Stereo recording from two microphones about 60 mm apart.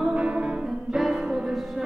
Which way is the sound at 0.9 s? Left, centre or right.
Centre.